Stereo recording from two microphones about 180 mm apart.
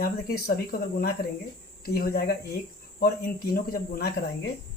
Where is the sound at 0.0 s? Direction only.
55° left (ahead or behind).